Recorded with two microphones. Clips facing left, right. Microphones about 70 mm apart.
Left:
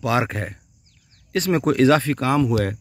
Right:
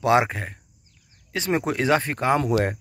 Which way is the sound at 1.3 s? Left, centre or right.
Centre.